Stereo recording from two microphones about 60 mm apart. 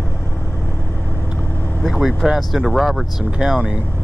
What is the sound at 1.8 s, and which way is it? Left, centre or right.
Vehicle, centre.